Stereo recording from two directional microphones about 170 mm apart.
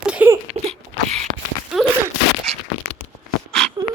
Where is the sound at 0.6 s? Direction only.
40° right (ahead or behind).